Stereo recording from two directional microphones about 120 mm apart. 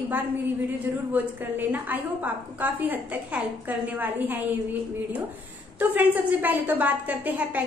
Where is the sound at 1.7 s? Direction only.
15° right (ahead or behind).